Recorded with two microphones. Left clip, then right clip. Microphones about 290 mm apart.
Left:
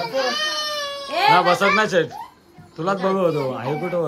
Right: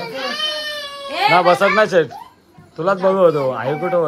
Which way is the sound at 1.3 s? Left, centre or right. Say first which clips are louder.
Right 3 dB; centre.